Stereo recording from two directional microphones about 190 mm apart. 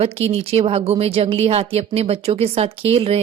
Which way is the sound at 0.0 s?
35° right (ahead or behind).